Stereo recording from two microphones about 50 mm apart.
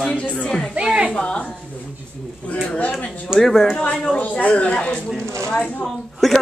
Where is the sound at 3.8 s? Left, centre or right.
Left.